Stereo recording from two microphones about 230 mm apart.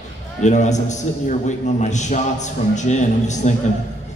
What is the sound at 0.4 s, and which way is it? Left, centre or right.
A man's voice, left.